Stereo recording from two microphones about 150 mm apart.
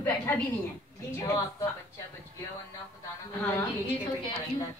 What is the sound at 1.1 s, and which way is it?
Speech, 20° left (ahead or behind).